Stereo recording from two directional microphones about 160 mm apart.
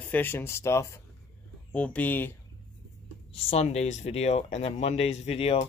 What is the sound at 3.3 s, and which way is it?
Speech, 40° left (ahead or behind).